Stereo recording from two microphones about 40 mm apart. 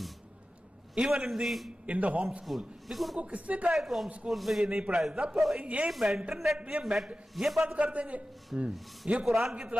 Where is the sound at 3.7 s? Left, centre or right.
Centre.